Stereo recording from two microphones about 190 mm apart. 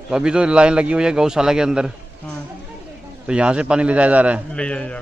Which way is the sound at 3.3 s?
5° right (ahead or behind).